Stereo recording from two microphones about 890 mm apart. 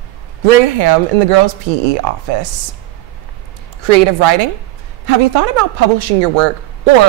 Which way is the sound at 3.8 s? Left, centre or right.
Right.